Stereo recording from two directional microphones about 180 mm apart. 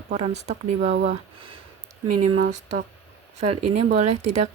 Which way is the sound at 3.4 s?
40° right (ahead or behind).